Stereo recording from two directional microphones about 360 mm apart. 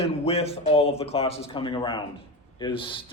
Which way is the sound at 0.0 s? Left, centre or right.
Centre.